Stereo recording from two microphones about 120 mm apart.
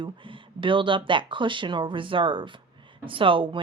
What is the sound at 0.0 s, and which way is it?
A woman's voice, 45° right (ahead or behind).